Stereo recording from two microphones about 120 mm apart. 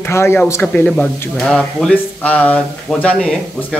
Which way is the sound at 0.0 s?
20° left (ahead or behind).